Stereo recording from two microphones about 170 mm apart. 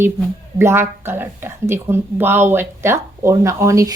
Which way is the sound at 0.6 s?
15° right (ahead or behind).